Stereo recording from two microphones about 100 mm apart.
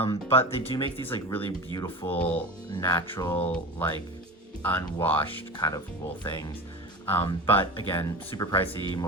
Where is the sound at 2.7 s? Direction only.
40° left (ahead or behind).